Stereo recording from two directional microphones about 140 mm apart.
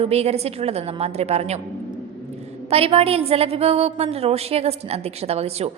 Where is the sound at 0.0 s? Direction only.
45° right (ahead or behind).